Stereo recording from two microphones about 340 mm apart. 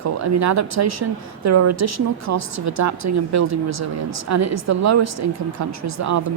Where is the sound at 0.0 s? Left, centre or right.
Right.